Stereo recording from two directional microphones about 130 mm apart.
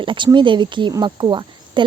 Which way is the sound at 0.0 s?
40° right (ahead or behind).